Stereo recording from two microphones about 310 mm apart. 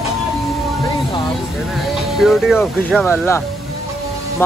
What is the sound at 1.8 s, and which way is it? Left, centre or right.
Speech, centre.